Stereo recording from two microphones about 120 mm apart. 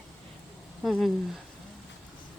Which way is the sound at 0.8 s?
Centre (ahead or behind).